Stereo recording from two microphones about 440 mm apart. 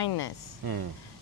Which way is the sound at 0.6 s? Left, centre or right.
Right.